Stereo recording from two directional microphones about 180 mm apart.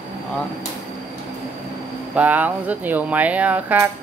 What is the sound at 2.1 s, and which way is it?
Speech, 10° right (ahead or behind).